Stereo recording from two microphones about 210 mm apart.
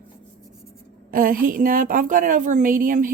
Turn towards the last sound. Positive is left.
turn(degrees=-40)  # may be behind; listen again after turning